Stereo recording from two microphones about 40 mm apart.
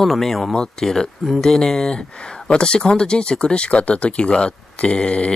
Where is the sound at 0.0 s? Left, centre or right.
Centre.